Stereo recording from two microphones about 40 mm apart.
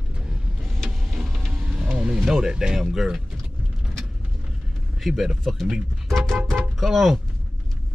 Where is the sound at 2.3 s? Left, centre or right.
Centre.